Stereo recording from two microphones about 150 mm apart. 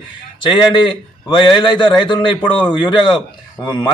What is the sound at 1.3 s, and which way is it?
A man's voice, 30° left (ahead or behind).